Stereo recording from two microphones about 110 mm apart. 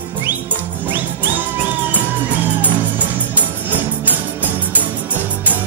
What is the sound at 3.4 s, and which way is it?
Music, 15° right (ahead or behind).